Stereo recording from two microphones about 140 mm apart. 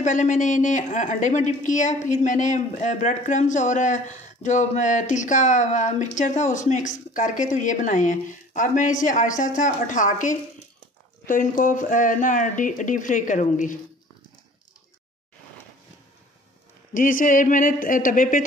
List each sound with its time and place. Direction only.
0.0 s a woman's voice: 60° left (ahead or behind)
16.9 s speech: 75° left (ahead or behind)